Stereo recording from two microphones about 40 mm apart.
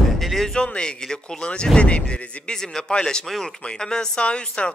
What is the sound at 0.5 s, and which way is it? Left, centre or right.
A man's voice, left.